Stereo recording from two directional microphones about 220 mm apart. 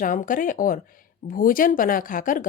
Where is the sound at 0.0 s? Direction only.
35° left (ahead or behind).